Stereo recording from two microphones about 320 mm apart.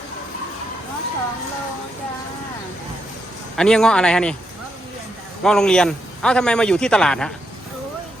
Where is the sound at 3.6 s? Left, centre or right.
Centre.